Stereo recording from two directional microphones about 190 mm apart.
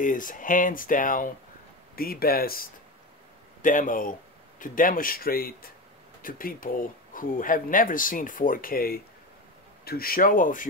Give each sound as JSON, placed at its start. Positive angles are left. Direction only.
{"t": 0.0, "sound": "speech", "side_deg": 45}
{"t": 3.6, "sound": "speech", "side_deg": 45}